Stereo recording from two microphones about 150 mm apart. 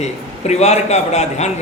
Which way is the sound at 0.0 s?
45° left (ahead or behind).